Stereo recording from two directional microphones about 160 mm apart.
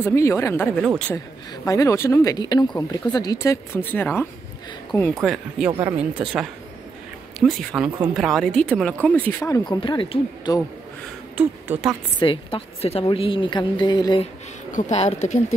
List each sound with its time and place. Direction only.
0.0 s speech: 20° left (ahead or behind)
1.1 s speech: 20° left (ahead or behind)
5.2 s speech: centre (ahead or behind)
5.7 s speech: 20° right (ahead or behind)
5.9 s speech: 5° right (ahead or behind); by 9.3 s 10° left (ahead or behind)
9.4 s speech: 25° left (ahead or behind)
11.3 s speech: 10° right (ahead or behind)
12.2 s a woman's voice: 30° left (ahead or behind)
14.2 s speech: 50° left (ahead or behind)